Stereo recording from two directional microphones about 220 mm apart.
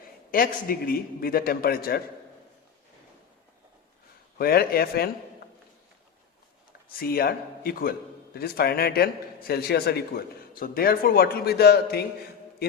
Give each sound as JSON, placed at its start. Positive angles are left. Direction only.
{"t": 0.3, "sound": "a man's voice", "side_deg": 40}
{"t": 4.4, "sound": "a man's voice", "side_deg": 45}
{"t": 7.0, "sound": "a man's voice", "side_deg": 45}